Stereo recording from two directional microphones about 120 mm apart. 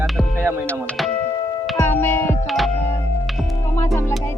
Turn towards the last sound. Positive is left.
turn(degrees=20)  # may be behind; listen again after turning